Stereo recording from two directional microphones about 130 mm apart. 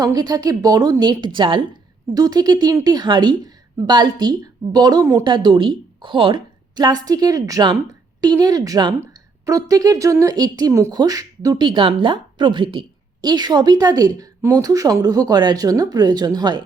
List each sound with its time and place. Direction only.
0.0 s a woman's voice: 30° right (ahead or behind)